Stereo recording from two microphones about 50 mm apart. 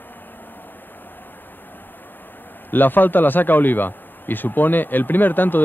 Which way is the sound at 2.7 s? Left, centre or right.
Left.